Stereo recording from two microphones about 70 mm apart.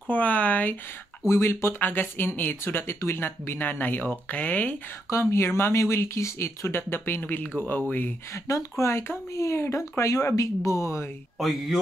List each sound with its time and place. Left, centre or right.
0.1 s speech: left
1.3 s speech: left
5.1 s speech: left
8.3 s speech: left
11.3 s speech: centre